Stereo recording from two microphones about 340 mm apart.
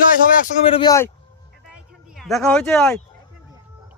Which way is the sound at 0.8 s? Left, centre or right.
Centre.